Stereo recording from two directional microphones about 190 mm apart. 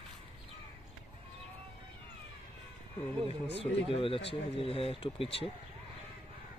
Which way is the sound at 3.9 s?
30° left (ahead or behind).